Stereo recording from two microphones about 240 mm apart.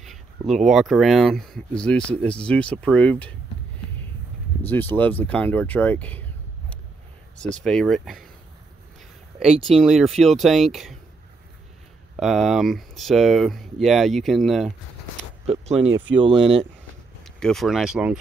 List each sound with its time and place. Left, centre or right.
0.0 s a sound: centre
0.7 s speech: centre
4.6 s speech: centre
7.6 s speech: centre
9.7 s speech: centre
12.2 s speech: centre
15.4 s a sound: right
16.2 s speech: right
17.2 s speech: centre